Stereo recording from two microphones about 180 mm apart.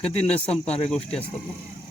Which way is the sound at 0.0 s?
35° left (ahead or behind).